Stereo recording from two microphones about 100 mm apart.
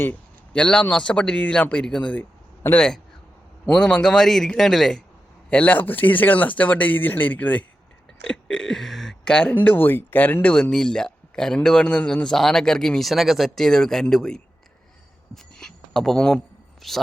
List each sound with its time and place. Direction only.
0.0 s a man's voice: 15° left (ahead or behind)
8.3 s burping: 10° left (ahead or behind)
9.6 s speech: 20° left (ahead or behind)
10.5 s a man's voice: 5° left (ahead or behind)
15.5 s a sound: 5° left (ahead or behind)
16.8 s a woman's voice: centre (ahead or behind)